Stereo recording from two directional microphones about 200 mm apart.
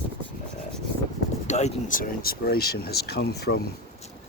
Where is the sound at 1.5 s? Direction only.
35° left (ahead or behind); by 3.6 s 55° left (ahead or behind).